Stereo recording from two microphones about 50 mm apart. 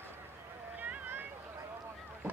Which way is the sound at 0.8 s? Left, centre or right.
Right.